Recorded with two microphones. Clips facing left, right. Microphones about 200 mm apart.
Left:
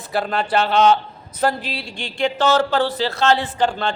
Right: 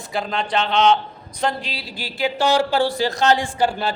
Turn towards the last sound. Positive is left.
turn(degrees=-10)  # may be behind; listen again after turning